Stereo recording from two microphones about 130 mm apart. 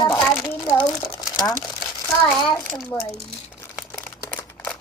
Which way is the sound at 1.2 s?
30° left (ahead or behind).